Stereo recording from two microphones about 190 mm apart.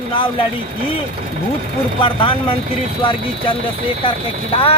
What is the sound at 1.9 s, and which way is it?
Speech, 25° left (ahead or behind).